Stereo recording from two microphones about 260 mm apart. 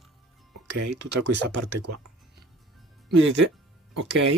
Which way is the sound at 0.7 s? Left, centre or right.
Right.